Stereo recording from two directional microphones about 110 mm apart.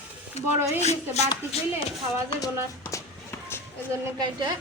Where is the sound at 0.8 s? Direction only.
80° left.